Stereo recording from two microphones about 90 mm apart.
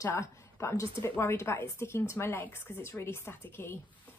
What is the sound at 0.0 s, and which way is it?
A woman's voice, 35° left (ahead or behind).